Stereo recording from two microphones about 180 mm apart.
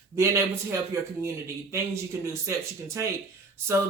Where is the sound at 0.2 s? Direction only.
15° right (ahead or behind).